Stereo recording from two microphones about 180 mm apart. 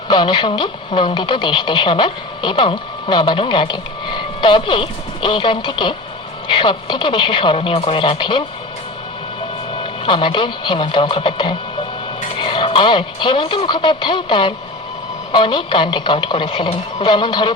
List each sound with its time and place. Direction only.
0.1 s speech: 25° left (ahead or behind)
10.1 s speech: 25° left (ahead or behind)